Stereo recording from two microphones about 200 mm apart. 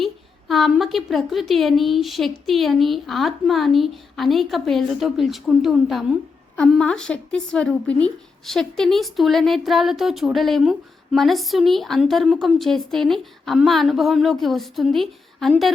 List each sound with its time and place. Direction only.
0.0 s a woman's voice: centre (ahead or behind)